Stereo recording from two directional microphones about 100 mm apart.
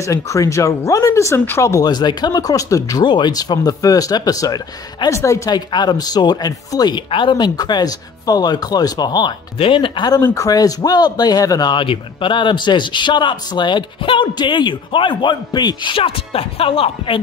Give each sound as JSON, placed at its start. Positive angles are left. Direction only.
{"t": 0.0, "sound": "speech", "side_deg": 30}
{"t": 3.1, "sound": "speech", "side_deg": 45}
{"t": 5.5, "sound": "a man's voice", "side_deg": 45}
{"t": 7.1, "sound": "a man's voice", "side_deg": 55}
{"t": 9.6, "sound": "speech", "side_deg": 60}
{"t": 10.2, "sound": "speech", "side_deg": 30}
{"t": 11.7, "sound": "a man's voice", "side_deg": 55}